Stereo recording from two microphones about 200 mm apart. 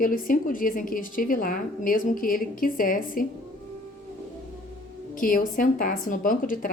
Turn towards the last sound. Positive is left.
turn(degrees=45)  # may be behind; listen again after turning